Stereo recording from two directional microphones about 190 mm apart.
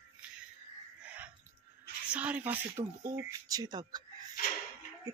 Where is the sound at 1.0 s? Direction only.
10° right (ahead or behind).